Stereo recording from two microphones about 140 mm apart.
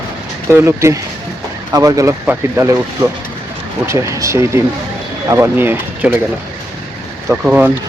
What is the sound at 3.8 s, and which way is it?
Speech, 20° right (ahead or behind).